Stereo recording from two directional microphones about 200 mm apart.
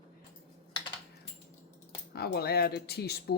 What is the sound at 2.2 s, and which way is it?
Speech, 50° left (ahead or behind).